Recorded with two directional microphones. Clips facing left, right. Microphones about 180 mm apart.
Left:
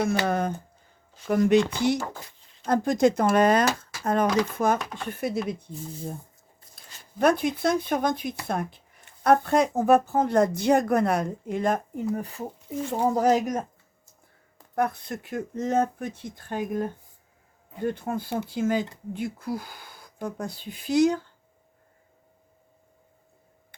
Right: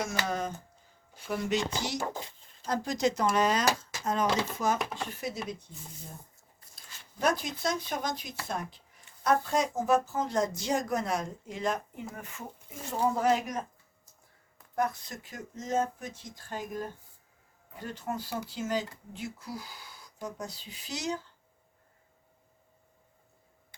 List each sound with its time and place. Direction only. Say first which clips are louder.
0.0 s speech: left 8 dB; 60° left (ahead or behind)
2.0 s a sound: left 1 dB; 20° right (ahead or behind)
2.6 s speech: left 8 dB; 55° left (ahead or behind)
7.0 s speech: left 8 dB; 55° left (ahead or behind)
12.1 s speech: left 11 dB; 35° left (ahead or behind)
14.8 s speech: left 5 dB; 60° left (ahead or behind)